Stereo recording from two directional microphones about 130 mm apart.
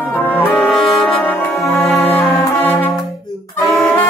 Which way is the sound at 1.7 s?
10° left (ahead or behind).